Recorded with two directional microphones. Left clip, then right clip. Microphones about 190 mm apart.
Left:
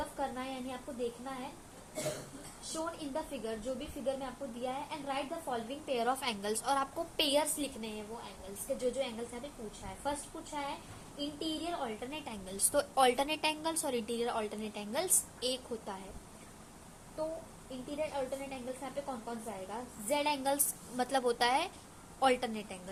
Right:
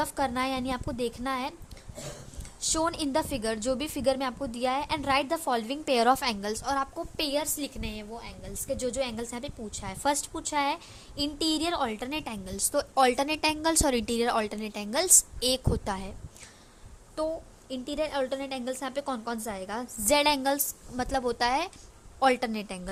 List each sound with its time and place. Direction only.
0.2 s a woman's voice: 50° right (ahead or behind)
2.7 s a woman's voice: 55° right (ahead or behind); by 7.7 s 40° right (ahead or behind)
7.8 s a woman's voice: 55° right (ahead or behind)
17.7 s a woman's voice: 60° right (ahead or behind); by 22.8 s 40° right (ahead or behind)